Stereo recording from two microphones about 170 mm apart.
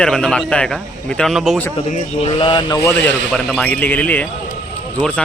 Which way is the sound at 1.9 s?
40° left (ahead or behind).